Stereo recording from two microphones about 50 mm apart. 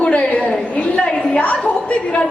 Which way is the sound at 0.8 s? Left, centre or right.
Left.